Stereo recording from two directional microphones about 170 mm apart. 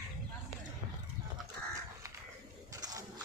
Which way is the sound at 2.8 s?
20° right (ahead or behind).